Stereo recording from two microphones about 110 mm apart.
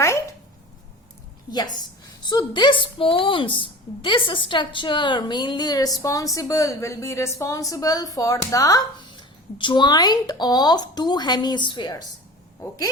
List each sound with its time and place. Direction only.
1.5 s a woman's voice: 35° left (ahead or behind)